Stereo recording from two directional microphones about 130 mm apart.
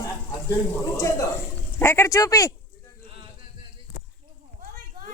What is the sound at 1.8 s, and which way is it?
Speech, 20° left (ahead or behind).